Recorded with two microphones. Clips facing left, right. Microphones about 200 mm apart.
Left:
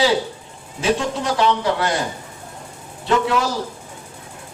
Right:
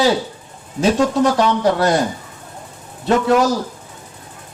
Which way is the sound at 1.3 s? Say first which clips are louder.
Right 3 dB; 40° right (ahead or behind).